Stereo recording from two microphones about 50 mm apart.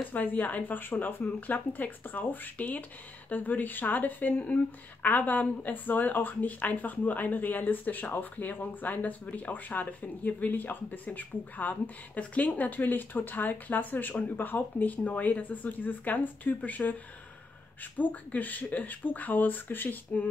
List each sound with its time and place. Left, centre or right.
0.1 s a woman's voice: left
17.9 s a woman's voice: left